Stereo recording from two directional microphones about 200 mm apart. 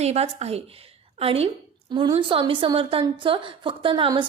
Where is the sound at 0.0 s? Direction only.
30° right (ahead or behind).